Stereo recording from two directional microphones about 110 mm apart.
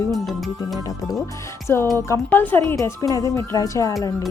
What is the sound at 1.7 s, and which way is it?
Speech, 20° left (ahead or behind).